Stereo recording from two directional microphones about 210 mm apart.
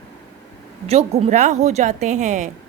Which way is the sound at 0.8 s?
30° right (ahead or behind).